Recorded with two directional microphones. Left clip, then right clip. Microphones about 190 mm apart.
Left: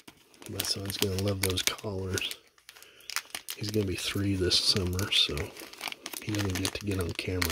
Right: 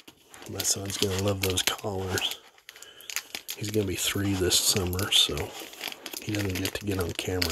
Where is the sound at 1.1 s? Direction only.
25° left (ahead or behind).